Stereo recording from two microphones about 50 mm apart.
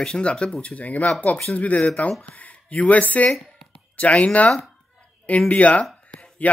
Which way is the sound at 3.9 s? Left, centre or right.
Left.